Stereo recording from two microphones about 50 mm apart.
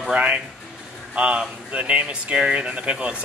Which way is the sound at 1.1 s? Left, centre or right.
Right.